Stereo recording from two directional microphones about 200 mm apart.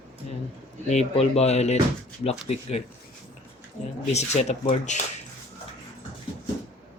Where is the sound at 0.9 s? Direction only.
30° left (ahead or behind).